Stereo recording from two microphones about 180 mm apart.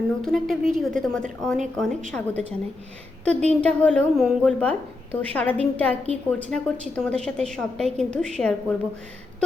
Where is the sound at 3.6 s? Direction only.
5° left (ahead or behind).